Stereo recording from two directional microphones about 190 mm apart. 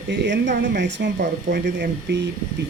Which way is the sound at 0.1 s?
70° right (ahead or behind).